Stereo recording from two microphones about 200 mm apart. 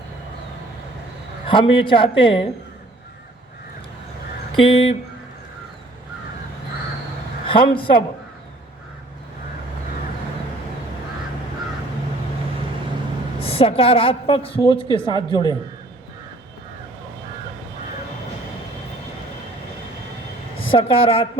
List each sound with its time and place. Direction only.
1.5 s a woman's voice: 25° left (ahead or behind)
4.5 s a woman's voice: 25° left (ahead or behind)
7.4 s speech: 25° left (ahead or behind)
13.4 s a woman's voice: 30° left (ahead or behind)
20.6 s speech: 25° left (ahead or behind)